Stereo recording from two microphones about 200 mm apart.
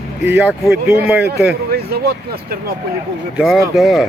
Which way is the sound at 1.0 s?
50° right (ahead or behind).